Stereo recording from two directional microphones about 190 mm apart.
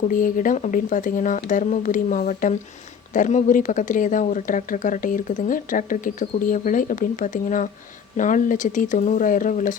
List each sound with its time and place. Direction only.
0.1 s speech: 45° left (ahead or behind)